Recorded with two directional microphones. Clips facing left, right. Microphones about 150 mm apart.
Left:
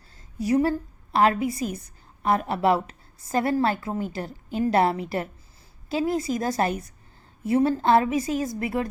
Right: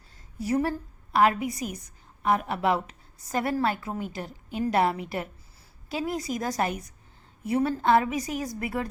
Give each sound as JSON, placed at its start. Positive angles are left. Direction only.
{"t": 1.1, "sound": "a woman's voice", "side_deg": 30}